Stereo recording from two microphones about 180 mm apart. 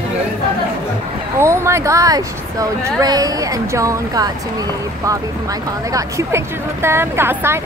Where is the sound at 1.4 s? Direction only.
15° right (ahead or behind).